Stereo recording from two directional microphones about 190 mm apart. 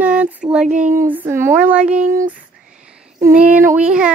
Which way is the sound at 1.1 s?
10° right (ahead or behind).